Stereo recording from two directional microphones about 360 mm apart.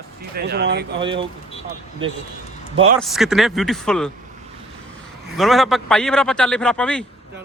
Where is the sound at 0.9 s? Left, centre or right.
Centre.